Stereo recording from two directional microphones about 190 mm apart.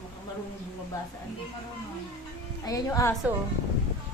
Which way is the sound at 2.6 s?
20° left (ahead or behind).